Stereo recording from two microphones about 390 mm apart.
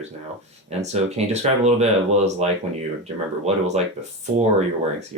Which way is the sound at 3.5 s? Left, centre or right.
Centre.